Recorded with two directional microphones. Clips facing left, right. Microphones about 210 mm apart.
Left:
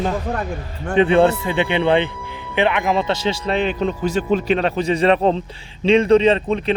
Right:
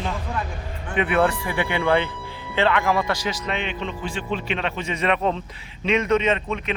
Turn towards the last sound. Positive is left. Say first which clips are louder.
# left 7 dB
turn(degrees=35)  # may be behind; listen again after turning